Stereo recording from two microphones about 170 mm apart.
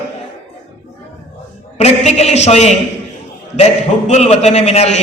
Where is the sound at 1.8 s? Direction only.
40° left (ahead or behind).